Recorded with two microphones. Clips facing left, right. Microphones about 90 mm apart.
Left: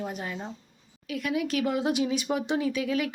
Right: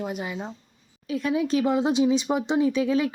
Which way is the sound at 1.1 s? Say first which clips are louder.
Right 5 dB; 30° right (ahead or behind).